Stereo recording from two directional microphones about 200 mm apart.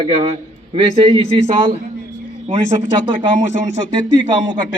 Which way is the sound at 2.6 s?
65° left (ahead or behind).